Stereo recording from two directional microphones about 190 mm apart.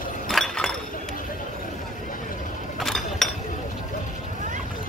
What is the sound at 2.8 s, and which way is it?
Chink, centre (ahead or behind).